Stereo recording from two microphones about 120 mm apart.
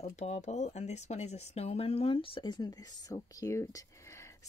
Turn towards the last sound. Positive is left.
turn(degrees=25)  # may be behind; listen again after turning